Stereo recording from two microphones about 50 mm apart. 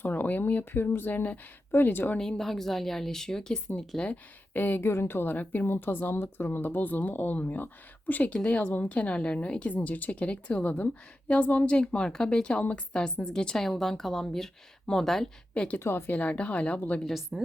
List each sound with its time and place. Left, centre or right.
0.0 s a woman's voice: left
0.6 s a woman's voice: left
2.1 s speech: centre
4.1 s a woman's voice: left
4.9 s a woman's voice: left
8.3 s a woman's voice: left
10.6 s a woman's voice: left; by 15.3 s centre
15.5 s a woman's voice: left
15.8 s speech: left
16.1 s a woman's voice: left
17.3 s speech: centre